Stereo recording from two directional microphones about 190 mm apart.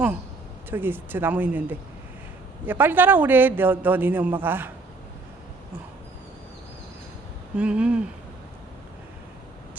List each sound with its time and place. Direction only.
0.7 s a man's voice: 10° right (ahead or behind)
7.5 s speech: 5° right (ahead or behind)